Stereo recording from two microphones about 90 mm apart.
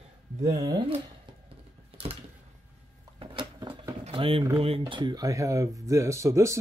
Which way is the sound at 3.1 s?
70° right (ahead or behind).